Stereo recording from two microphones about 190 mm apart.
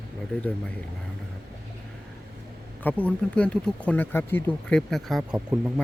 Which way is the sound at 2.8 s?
5° left (ahead or behind).